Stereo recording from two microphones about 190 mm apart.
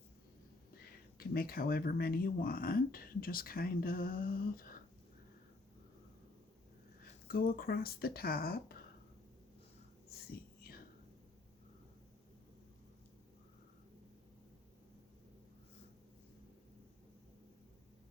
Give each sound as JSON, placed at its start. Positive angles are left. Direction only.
{"t": 1.2, "sound": "speech", "side_deg": 50}
{"t": 7.3, "sound": "speech", "side_deg": 50}
{"t": 10.6, "sound": "whispering", "side_deg": 50}